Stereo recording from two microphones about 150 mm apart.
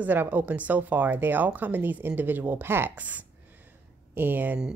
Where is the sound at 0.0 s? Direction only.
10° right (ahead or behind).